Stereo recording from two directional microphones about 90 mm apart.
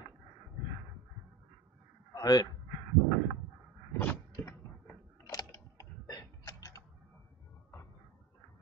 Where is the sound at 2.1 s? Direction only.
45° left (ahead or behind).